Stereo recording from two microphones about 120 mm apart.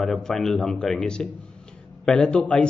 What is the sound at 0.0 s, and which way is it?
A man's voice, 5° left (ahead or behind).